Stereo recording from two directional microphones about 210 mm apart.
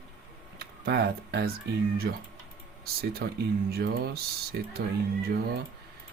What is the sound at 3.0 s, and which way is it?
Speech, 45° right (ahead or behind).